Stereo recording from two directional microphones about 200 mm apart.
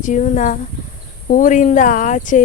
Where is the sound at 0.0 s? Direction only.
40° left (ahead or behind).